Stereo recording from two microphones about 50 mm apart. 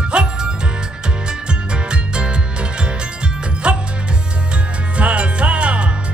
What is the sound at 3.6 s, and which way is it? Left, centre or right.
Music, centre.